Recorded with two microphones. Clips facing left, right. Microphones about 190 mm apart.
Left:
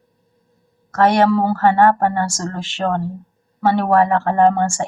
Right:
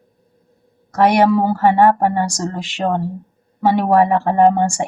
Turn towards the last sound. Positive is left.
turn(degrees=-15)  # may be behind; listen again after turning